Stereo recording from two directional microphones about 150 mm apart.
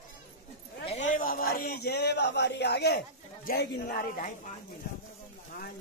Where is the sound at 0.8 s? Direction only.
55° left (ahead or behind); by 3.0 s 90° left.